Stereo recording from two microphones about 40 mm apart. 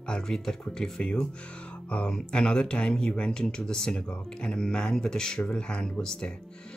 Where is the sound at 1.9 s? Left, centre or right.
Left.